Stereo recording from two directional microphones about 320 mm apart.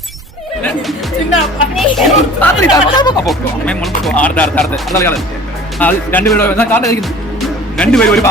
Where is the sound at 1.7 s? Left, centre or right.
Centre.